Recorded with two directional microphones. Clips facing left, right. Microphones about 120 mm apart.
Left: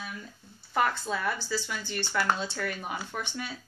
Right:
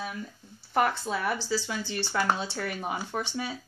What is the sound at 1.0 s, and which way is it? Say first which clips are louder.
Speech: right 2 dB; 15° right (ahead or behind).